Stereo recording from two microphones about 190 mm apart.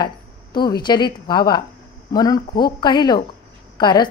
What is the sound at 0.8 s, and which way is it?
A woman's voice, 20° left (ahead or behind).